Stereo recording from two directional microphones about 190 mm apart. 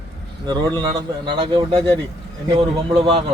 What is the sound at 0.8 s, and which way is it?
A man's voice, 25° right (ahead or behind).